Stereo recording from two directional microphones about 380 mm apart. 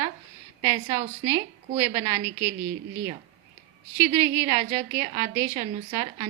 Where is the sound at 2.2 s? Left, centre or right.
Right.